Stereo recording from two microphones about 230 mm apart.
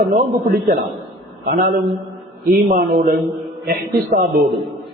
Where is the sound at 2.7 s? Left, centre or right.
Right.